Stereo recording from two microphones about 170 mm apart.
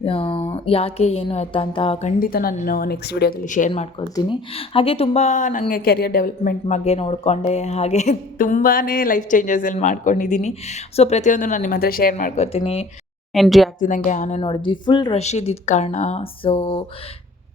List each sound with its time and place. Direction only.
0.0 s speech: 30° left (ahead or behind)
2.1 s a woman's voice: 60° left (ahead or behind)
3.4 s speech: 50° left (ahead or behind)
4.1 s speech: 25° left (ahead or behind); by 5.6 s 45° left (ahead or behind)
5.7 s speech: 65° left (ahead or behind); by 12.9 s 35° left (ahead or behind)
13.3 s speech: centre (ahead or behind)
13.7 s speech: 50° left (ahead or behind)
14.4 s speech: 30° left (ahead or behind)
15.1 s speech: 40° left (ahead or behind)